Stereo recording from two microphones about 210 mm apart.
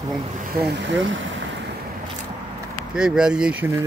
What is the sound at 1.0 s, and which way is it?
Speech, 65° right (ahead or behind).